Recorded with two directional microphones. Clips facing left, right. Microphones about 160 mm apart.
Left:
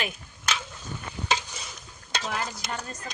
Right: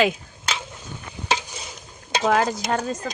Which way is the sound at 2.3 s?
90° right.